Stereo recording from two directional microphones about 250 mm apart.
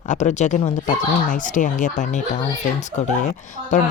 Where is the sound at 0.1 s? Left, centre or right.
Left.